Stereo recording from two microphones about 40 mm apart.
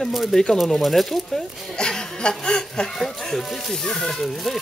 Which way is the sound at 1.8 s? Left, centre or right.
Centre.